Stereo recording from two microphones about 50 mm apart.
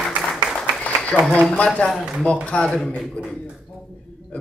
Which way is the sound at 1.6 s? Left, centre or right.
Left.